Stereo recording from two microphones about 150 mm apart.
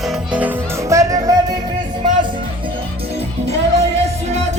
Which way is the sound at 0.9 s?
20° right (ahead or behind).